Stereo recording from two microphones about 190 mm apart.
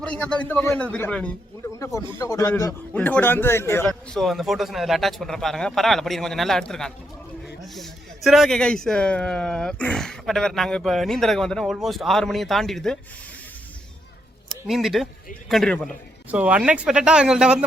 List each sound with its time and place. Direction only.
0.0 s a man's voice: 5° left (ahead or behind)
3.8 s speech: centre (ahead or behind)
14.7 s speech: centre (ahead or behind)